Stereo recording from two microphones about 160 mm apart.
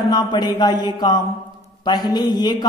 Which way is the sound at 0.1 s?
25° left (ahead or behind).